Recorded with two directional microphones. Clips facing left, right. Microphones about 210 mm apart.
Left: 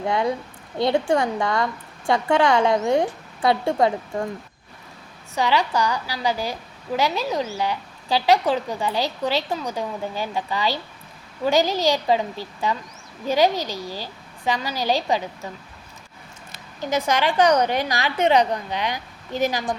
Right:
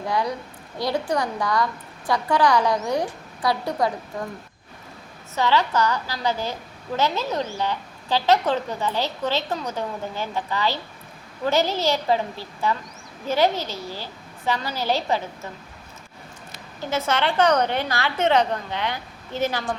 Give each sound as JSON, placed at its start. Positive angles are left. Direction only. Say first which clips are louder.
{"t": 0.0, "sound": "a woman's voice", "louder": "left 3 dB", "side_deg": 25}
{"t": 5.3, "sound": "a woman's voice", "louder": "even", "side_deg": 15}
{"t": 16.8, "sound": "a woman's voice", "louder": "left 2 dB", "side_deg": 15}